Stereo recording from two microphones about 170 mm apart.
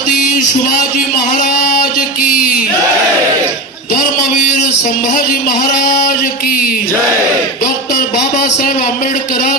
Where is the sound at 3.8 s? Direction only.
55° left (ahead or behind).